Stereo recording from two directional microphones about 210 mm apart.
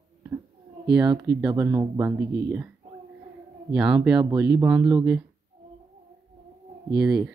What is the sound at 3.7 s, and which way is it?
Speech, 5° right (ahead or behind).